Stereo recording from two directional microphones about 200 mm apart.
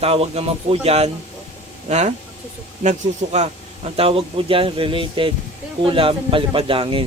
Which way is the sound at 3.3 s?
30° right (ahead or behind).